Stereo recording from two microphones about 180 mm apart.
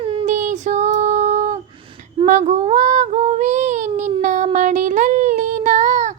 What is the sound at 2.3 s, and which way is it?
Child singing, 40° right (ahead or behind).